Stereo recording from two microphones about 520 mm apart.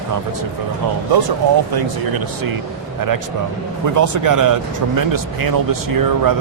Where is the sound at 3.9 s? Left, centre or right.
Right.